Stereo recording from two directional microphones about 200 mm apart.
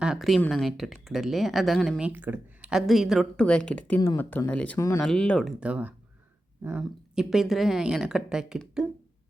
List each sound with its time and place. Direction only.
0.0 s speech: centre (ahead or behind)